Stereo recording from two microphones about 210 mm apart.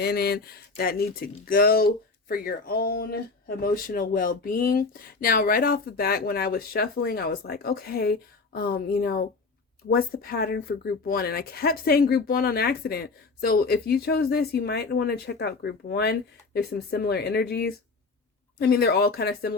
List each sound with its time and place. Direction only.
0.0 s speech: 50° left (ahead or behind)